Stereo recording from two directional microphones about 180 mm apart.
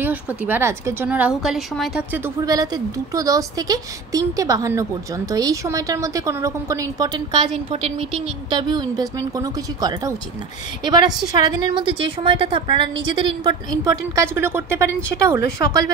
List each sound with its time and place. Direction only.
0.0 s a woman's voice: 10° right (ahead or behind)
2.4 s a woman's voice: 20° right (ahead or behind)